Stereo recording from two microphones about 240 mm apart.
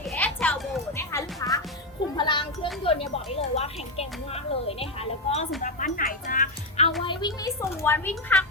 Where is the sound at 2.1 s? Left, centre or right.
Centre.